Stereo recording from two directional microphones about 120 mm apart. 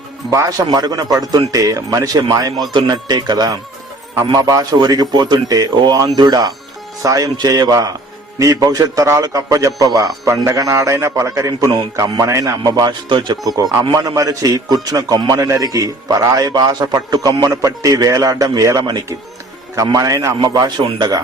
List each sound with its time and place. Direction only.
0.3 s a man's voice: 30° right (ahead or behind)